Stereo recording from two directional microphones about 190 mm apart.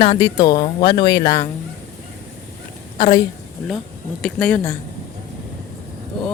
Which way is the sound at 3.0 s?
25° left (ahead or behind).